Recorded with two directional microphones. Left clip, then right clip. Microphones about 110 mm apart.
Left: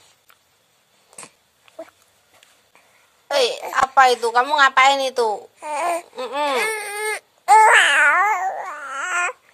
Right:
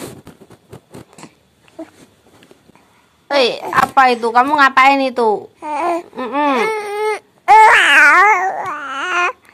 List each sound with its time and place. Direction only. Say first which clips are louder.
1.2 s zipper: left 2 dB; 40° left (ahead or behind)
3.3 s a sound: right 5 dB; 10° right (ahead or behind)
3.9 s a woman's voice: right 2 dB; 15° right (ahead or behind)
5.6 s speech: right 4 dB; 50° left (ahead or behind)
6.1 s a woman's voice: right 5 dB; 10° right (ahead or behind)
6.6 s baby cry: right 6 dB; 45° left (ahead or behind)
7.6 s babbling: right 5 dB; centre (ahead or behind)